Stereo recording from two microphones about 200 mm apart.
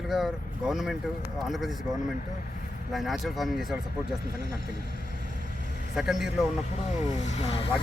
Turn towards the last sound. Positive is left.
turn(degrees=30)  # may be behind; listen again after turning